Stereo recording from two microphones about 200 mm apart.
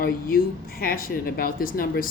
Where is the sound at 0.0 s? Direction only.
45° left (ahead or behind).